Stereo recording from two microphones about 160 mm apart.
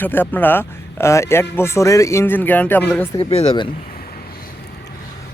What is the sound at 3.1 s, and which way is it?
Speech, 35° left (ahead or behind).